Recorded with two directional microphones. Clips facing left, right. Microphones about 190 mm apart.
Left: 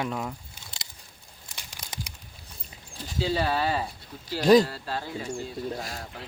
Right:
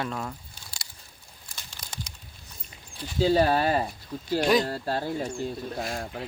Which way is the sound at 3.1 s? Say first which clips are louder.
Right 5 dB; 45° right (ahead or behind).